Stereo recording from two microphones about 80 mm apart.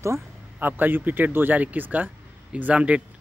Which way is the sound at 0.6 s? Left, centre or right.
Right.